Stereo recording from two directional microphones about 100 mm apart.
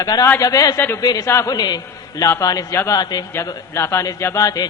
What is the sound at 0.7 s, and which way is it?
Speech, 20° left (ahead or behind).